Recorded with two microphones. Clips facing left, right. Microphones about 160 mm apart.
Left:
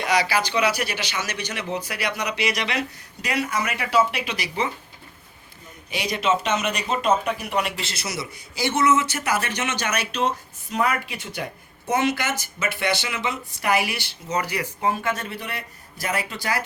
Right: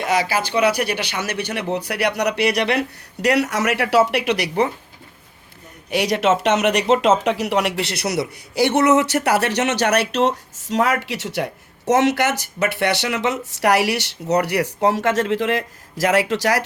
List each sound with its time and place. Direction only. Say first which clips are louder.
0.2 s speech: right 3 dB; 45° right (ahead or behind)
5.9 s speech: right 6 dB; 70° right (ahead or behind)